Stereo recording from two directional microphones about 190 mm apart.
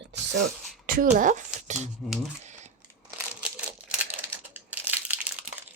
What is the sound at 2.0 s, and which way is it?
Speech, centre (ahead or behind).